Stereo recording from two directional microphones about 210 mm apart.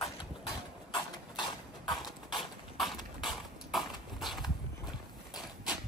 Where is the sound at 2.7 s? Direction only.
Centre (ahead or behind).